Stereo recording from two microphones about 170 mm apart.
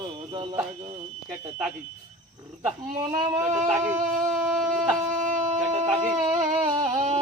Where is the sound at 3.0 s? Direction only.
30° right (ahead or behind).